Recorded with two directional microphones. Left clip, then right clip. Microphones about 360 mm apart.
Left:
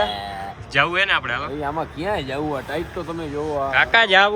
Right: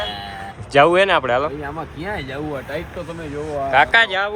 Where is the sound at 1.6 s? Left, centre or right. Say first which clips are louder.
Left 3 dB; centre.